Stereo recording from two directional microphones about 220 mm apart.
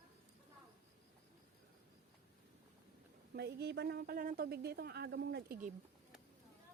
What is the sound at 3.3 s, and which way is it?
A woman's voice, 50° right (ahead or behind).